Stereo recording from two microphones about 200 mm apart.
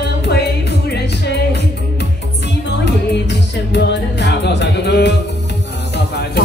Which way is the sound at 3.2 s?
60° left (ahead or behind).